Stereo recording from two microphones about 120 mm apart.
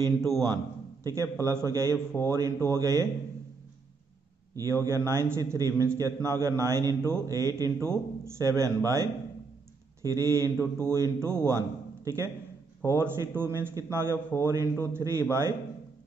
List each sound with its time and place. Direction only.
0.0 s a man's voice: 30° right (ahead or behind)
4.8 s a man's voice: 20° right (ahead or behind)